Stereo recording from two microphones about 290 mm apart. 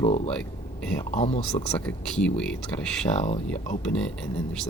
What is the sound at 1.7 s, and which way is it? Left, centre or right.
Speech, centre.